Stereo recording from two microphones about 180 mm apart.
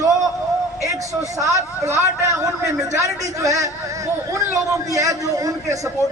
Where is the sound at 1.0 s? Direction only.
20° right (ahead or behind).